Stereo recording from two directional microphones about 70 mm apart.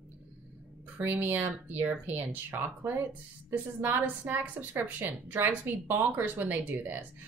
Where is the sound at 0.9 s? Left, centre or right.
Right.